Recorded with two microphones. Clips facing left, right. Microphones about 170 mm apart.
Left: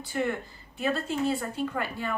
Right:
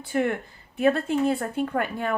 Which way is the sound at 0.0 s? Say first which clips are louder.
Right 4 dB; 60° right (ahead or behind).